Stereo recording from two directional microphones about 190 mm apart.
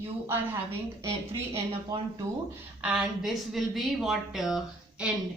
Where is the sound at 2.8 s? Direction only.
5° right (ahead or behind).